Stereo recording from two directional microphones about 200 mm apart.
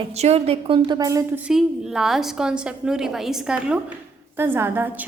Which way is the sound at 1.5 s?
Centre (ahead or behind).